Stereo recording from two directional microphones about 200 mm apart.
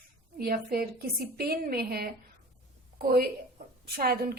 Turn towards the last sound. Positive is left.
turn(degrees=-50)  # may be behind; listen again after turning